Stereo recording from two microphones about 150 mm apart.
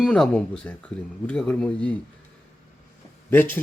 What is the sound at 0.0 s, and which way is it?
Speech, 5° left (ahead or behind).